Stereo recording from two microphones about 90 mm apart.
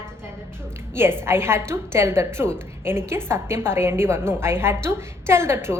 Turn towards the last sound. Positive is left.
turn(degrees=-30)  # may be behind; listen again after turning